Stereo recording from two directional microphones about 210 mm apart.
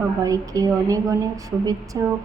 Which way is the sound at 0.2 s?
15° right (ahead or behind).